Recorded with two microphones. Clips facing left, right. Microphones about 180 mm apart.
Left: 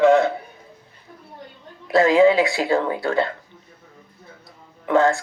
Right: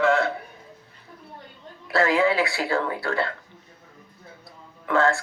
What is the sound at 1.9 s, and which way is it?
Speech, 20° left (ahead or behind).